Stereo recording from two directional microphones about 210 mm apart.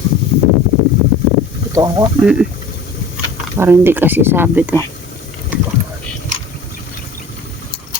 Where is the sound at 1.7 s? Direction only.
15° right (ahead or behind).